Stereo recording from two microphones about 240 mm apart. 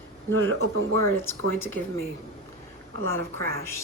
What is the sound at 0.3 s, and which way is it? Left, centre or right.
Speech, right.